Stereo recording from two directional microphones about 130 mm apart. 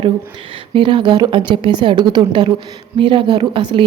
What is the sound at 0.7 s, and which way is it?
A woman's voice, 40° right (ahead or behind).